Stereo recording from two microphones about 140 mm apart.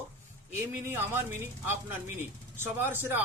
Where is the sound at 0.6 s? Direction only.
15° right (ahead or behind).